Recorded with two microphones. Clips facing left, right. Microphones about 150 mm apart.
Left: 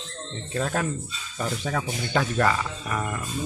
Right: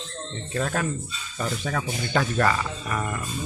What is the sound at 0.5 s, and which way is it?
A man's voice, 20° left (ahead or behind).